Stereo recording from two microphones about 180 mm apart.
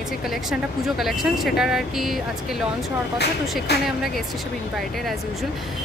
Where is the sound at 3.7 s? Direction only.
65° left (ahead or behind).